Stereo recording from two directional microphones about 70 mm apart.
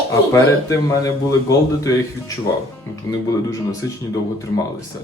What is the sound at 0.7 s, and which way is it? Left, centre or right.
A man's voice, left.